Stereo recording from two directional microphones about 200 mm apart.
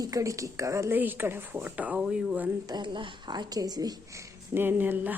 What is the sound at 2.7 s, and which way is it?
A woman's voice, 20° right (ahead or behind).